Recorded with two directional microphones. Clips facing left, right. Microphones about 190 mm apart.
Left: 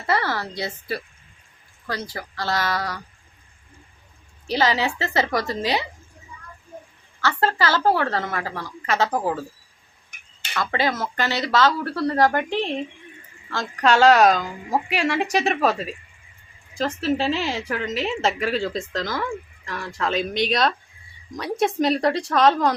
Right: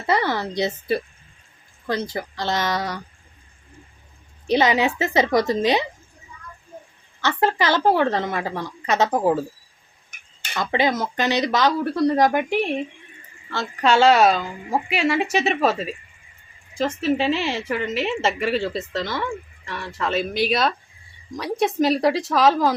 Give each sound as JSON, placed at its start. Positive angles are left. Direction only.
{"t": 0.1, "sound": "a woman's voice", "side_deg": -20}
{"t": 4.4, "sound": "a woman's voice", "side_deg": -20}
{"t": 7.2, "sound": "a woman's voice", "side_deg": -20}
{"t": 10.5, "sound": "speech", "side_deg": -20}
{"t": 17.7, "sound": "a woman's voice", "side_deg": -5}